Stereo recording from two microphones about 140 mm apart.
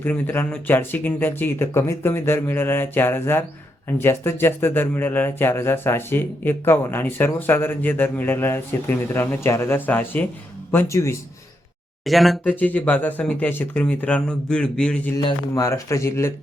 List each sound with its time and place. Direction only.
0.0 s speech: 15° left (ahead or behind)
12.0 s speech: centre (ahead or behind)
12.5 s speech: 10° left (ahead or behind)
15.2 s speech: 25° left (ahead or behind)